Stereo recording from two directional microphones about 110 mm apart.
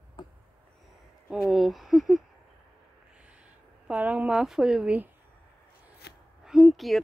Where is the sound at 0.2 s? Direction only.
40° left (ahead or behind).